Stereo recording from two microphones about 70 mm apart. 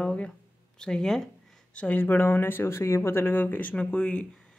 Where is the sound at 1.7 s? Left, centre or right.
Left.